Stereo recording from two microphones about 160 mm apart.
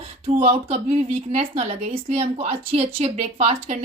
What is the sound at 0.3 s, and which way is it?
A woman's voice, 35° right (ahead or behind).